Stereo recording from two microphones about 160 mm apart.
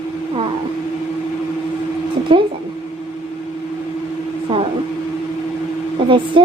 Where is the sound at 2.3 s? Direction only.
35° right (ahead or behind).